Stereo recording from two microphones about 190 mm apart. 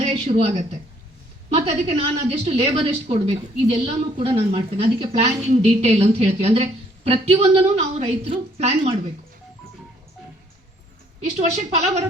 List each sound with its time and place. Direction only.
0.0 s a woman's voice: 30° right (ahead or behind)
11.3 s a woman's voice: 35° right (ahead or behind)